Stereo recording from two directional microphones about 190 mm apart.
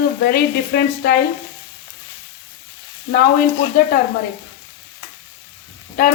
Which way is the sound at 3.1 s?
55° left (ahead or behind).